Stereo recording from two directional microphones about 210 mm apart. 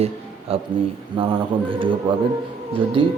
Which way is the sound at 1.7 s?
25° right (ahead or behind).